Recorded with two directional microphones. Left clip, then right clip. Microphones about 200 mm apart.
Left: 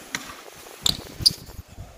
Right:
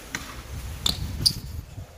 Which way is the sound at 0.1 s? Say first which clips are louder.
Left 2 dB; 45° left (ahead or behind).